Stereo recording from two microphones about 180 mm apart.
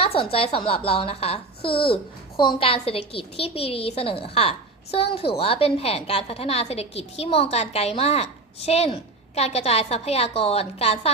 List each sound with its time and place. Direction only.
0.0 s a child's voice: 30° left (ahead or behind)